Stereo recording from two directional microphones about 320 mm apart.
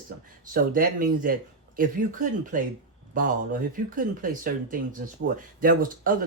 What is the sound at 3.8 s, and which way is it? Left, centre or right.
Speech, right.